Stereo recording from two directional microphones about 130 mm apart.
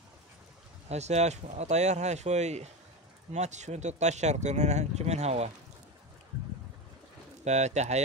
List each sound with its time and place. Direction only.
0.8 s speech: 60° right (ahead or behind)
7.4 s speech: 60° right (ahead or behind)